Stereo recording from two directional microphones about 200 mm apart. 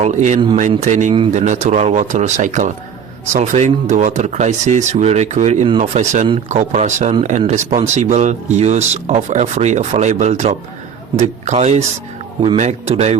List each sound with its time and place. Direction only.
0.0 s speech: 35° right (ahead or behind)